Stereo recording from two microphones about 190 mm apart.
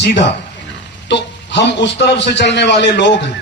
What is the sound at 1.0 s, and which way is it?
A man's voice, 65° left (ahead or behind).